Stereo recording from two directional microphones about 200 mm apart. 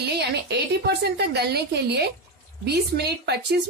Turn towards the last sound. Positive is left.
turn(degrees=-55)  # may be behind; listen again after turning